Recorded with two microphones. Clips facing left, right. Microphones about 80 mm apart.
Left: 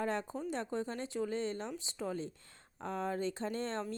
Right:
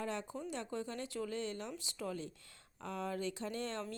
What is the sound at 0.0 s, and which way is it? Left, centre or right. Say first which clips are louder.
Speech: left 5 dB; left.